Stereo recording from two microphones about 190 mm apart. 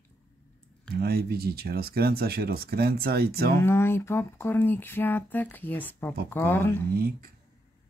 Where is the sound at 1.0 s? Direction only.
55° right (ahead or behind).